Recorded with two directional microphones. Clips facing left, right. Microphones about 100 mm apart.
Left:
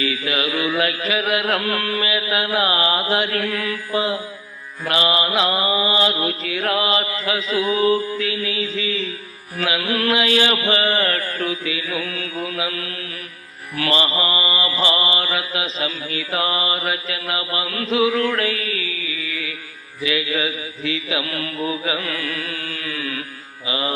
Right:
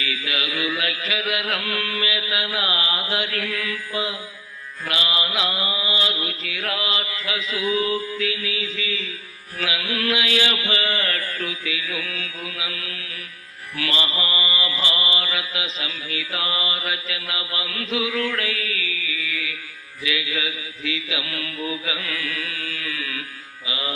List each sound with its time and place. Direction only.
0.0 s mantra: 35° left (ahead or behind)